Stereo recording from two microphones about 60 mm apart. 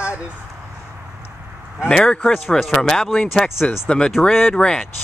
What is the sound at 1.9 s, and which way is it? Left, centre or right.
Speech, centre.